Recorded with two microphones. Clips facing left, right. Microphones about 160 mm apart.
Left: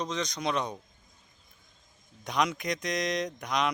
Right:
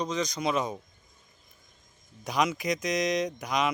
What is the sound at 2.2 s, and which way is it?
Speech, centre (ahead or behind).